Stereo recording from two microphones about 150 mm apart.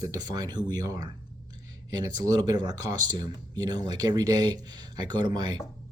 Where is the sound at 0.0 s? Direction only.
25° right (ahead or behind).